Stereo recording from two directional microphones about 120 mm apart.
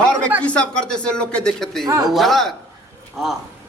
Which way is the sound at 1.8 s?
30° right (ahead or behind).